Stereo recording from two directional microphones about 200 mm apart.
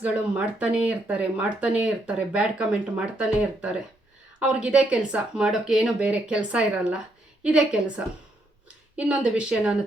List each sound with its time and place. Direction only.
0.0 s speech: 5° right (ahead or behind)